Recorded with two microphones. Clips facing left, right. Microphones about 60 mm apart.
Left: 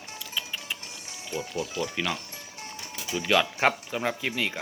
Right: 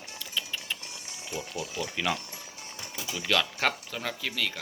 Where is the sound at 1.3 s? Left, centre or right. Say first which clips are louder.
Left 4 dB; left.